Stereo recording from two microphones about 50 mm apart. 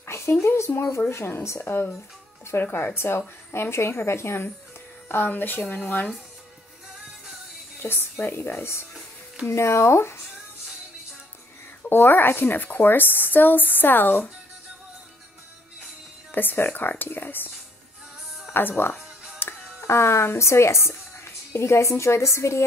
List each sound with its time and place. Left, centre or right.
0.0 s a sound: left
0.4 s a woman's voice: left
1.6 s a woman's voice: left
5.0 s a woman's voice: left
7.8 s a woman's voice: left
9.5 s a woman's voice: left
11.9 s speech: left
16.3 s a woman's voice: left
18.5 s a woman's voice: left
19.4 s music: left
19.9 s a woman's voice: left